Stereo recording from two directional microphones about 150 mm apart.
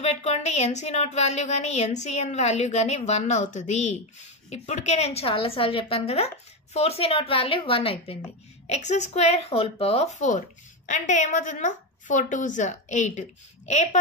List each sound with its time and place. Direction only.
0.0 s a woman's voice: 45° left (ahead or behind)